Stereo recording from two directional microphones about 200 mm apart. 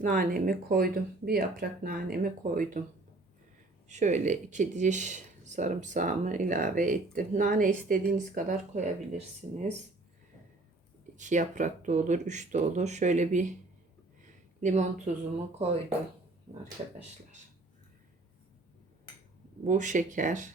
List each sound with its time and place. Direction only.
0.0 s speech: 45° right (ahead or behind)
3.8 s speech: 35° right (ahead or behind)
11.2 s speech: 40° right (ahead or behind)
14.6 s speech: 35° right (ahead or behind)
16.8 s speech: 25° right (ahead or behind)
19.6 s speech: 40° right (ahead or behind)